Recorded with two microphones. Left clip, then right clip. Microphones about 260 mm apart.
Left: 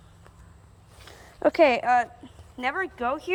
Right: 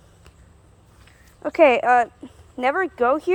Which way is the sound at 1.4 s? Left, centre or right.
Centre.